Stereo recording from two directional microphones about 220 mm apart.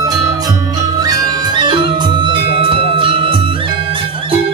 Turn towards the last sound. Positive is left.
turn(degrees=-25)  # may be behind; listen again after turning